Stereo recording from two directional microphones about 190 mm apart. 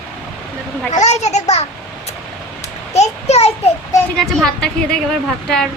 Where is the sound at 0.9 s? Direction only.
35° left (ahead or behind).